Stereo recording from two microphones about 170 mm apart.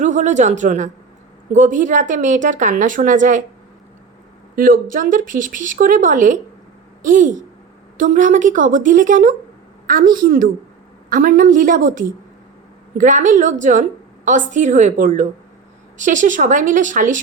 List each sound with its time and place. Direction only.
0.0 s a woman's voice: 45° right (ahead or behind)
4.5 s a woman's voice: 55° right (ahead or behind)